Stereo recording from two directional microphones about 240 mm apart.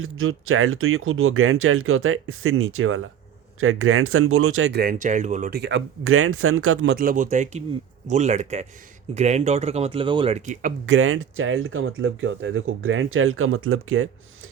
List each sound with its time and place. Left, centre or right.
0.0 s speech: right
4.8 s speech: right
6.9 s speech: right
10.8 s speech: right